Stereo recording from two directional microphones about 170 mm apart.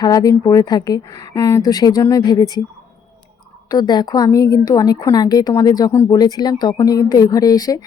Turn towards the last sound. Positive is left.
turn(degrees=20)  # may be behind; listen again after turning